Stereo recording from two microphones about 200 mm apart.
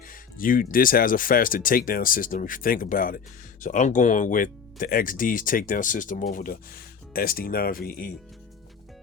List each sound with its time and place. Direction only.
0.1 s speech: 45° left (ahead or behind)